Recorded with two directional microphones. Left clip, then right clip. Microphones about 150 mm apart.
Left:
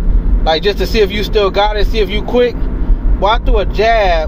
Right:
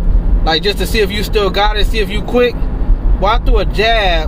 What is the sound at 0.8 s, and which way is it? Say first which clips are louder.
Speech: left 2 dB; 20° right (ahead or behind).